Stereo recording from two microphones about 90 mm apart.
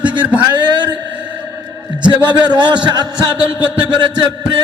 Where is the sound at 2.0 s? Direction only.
55° right (ahead or behind).